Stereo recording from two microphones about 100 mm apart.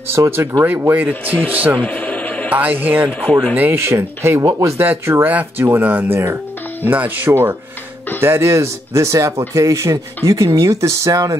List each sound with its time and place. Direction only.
0.1 s speech: 25° right (ahead or behind)
1.8 s a sound: 15° left (ahead or behind)
2.5 s speech: 15° right (ahead or behind)
3.1 s speech: 10° left (ahead or behind)
3.5 s speech: 20° right (ahead or behind)